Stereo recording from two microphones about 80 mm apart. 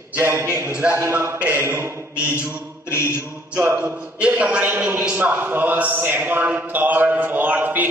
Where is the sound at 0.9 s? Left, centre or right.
Right.